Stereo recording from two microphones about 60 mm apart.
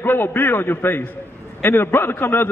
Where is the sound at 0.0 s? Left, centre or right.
Left.